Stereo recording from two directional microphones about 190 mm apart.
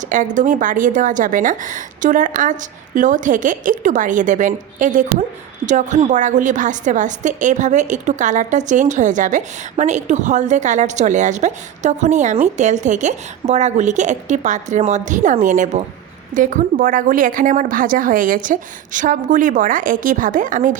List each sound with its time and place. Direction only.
0.1 s a woman's voice: 40° right (ahead or behind)